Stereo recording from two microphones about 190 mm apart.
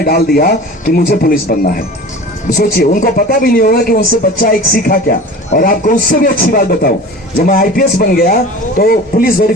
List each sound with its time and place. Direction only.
0.0 s speech: 55° left (ahead or behind)